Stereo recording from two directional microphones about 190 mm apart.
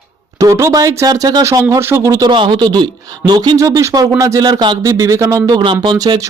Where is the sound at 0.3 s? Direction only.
15° right (ahead or behind).